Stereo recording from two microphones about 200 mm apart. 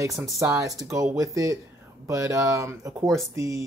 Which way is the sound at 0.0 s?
15° right (ahead or behind).